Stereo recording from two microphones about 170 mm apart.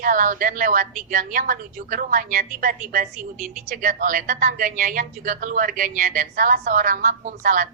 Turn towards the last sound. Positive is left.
turn(degrees=-50)  # may be behind; listen again after turning